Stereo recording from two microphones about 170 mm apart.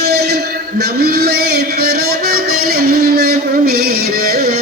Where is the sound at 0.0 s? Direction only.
70° right (ahead or behind).